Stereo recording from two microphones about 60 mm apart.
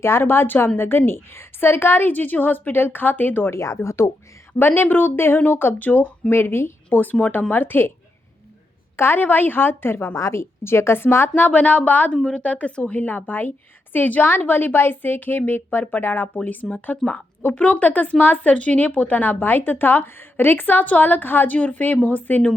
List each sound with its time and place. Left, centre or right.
0.0 s a woman's voice: left
3.5 s a woman's voice: left
4.6 s a woman's voice: left
6.3 s a woman's voice: left
6.9 s a woman's voice: left
9.0 s a woman's voice: left
10.2 s a woman's voice: left
12.1 s a woman's voice: centre